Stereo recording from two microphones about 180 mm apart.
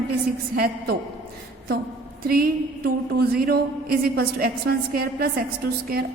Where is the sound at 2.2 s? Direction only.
55° right (ahead or behind).